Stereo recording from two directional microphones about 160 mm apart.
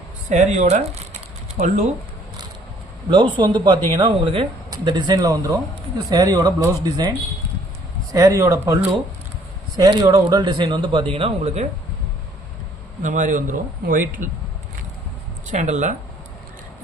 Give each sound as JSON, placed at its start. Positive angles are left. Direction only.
{"t": 0.3, "sound": "a man's voice", "side_deg": -45}
{"t": 3.1, "sound": "speech", "side_deg": -30}
{"t": 8.1, "sound": "speech", "side_deg": -20}
{"t": 13.0, "sound": "a man's voice", "side_deg": -50}
{"t": 15.4, "sound": "a man's voice", "side_deg": -50}